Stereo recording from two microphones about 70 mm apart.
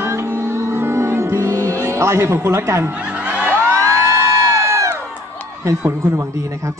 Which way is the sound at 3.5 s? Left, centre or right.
Right.